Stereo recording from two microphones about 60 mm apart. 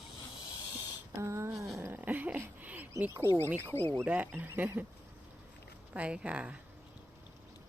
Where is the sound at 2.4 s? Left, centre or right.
Right.